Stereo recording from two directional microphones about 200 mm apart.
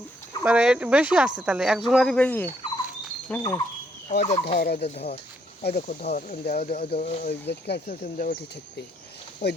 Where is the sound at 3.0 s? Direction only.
5° left (ahead or behind).